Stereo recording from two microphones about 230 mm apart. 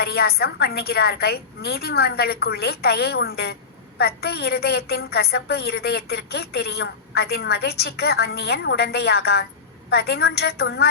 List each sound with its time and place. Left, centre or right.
0.0 s a woman's voice: left